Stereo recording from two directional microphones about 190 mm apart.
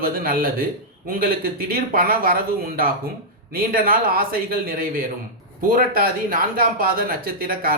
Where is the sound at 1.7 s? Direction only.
50° right (ahead or behind).